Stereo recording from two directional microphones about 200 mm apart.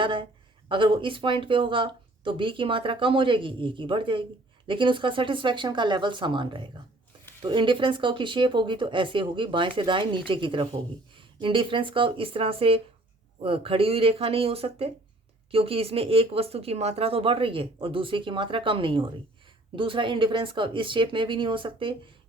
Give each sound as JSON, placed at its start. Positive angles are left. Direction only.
{"t": 0.0, "sound": "a woman's voice", "side_deg": -25}